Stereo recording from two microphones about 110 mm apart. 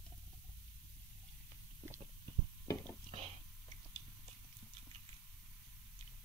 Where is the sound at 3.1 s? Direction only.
70° right (ahead or behind).